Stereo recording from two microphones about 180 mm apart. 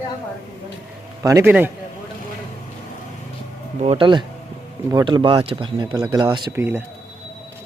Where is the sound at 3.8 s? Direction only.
30° right (ahead or behind).